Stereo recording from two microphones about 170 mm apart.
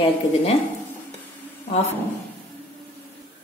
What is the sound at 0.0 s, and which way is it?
Speech, 35° left (ahead or behind).